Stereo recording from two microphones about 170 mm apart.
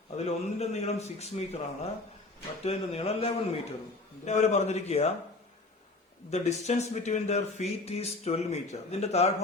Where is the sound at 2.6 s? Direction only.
35° left (ahead or behind).